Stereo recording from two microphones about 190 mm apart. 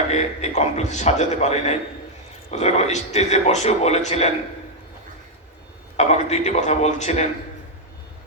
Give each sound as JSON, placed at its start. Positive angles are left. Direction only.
{"t": 0.1, "sound": "speech", "side_deg": 35}
{"t": 6.0, "sound": "speech", "side_deg": 35}